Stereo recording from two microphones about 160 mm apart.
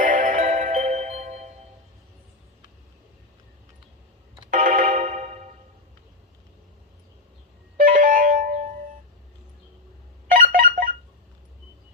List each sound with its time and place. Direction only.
0.0 s music: 55° right (ahead or behind)
4.5 s music: 55° right (ahead or behind)
7.8 s music: 55° right (ahead or behind)
10.2 s a sound: 60° right (ahead or behind)